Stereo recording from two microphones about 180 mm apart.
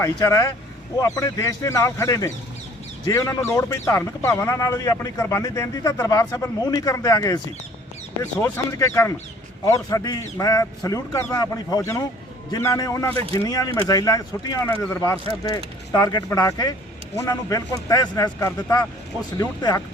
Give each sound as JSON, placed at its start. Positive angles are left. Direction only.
{"t": 0.0, "sound": "speech", "side_deg": 15}